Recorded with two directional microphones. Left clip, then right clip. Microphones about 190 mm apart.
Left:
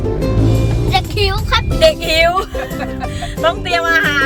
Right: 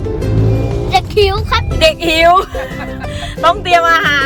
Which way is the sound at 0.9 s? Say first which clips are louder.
Right 5 dB; 10° right (ahead or behind).